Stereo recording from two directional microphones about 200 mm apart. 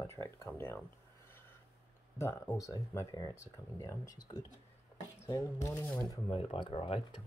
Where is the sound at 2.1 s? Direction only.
15° left (ahead or behind).